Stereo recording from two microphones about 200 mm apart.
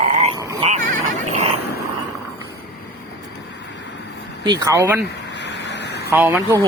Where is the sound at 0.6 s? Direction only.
35° right (ahead or behind).